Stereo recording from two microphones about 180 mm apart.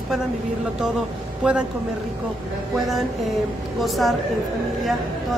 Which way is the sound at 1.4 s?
5° right (ahead or behind).